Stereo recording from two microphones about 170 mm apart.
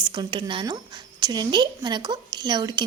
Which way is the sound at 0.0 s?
25° right (ahead or behind).